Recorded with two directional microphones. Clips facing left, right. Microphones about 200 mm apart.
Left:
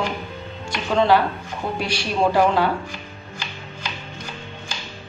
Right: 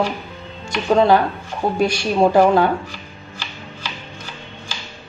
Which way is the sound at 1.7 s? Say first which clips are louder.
Right 6 dB; 45° right (ahead or behind).